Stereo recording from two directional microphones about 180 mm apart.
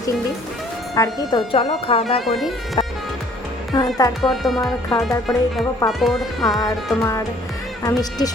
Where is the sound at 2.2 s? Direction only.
Centre (ahead or behind).